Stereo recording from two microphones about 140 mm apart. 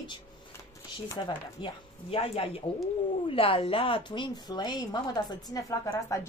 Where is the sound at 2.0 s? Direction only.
45° left (ahead or behind).